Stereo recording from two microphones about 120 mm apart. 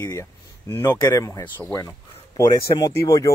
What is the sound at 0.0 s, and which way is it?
Speech, 25° left (ahead or behind).